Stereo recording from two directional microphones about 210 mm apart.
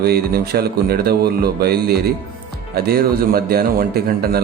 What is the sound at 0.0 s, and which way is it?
Speech, 50° right (ahead or behind).